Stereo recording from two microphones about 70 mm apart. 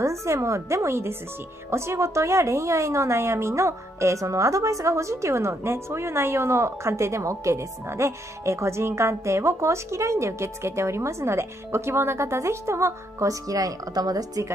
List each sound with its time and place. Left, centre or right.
0.0 s a woman's voice: right